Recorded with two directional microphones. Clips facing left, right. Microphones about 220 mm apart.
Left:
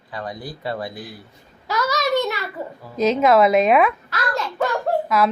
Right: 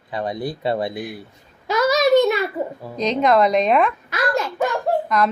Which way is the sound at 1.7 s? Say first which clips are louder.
Right 6 dB; 25° right (ahead or behind).